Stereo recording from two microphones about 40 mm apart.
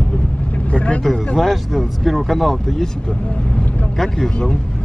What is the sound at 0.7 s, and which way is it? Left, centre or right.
Speech, left.